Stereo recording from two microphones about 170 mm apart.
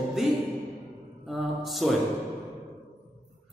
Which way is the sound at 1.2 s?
Centre (ahead or behind).